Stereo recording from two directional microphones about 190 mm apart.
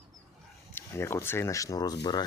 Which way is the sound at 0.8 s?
15° left (ahead or behind).